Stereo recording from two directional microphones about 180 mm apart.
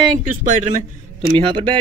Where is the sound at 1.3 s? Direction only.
30° right (ahead or behind).